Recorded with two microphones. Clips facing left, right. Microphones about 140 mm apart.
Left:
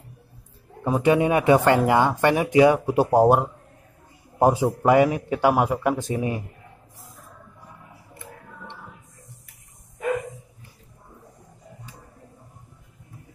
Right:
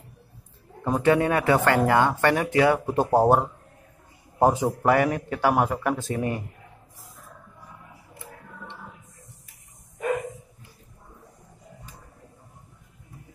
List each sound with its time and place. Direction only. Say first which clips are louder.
1.0 s a man's voice: left 2 dB; 15° left (ahead or behind)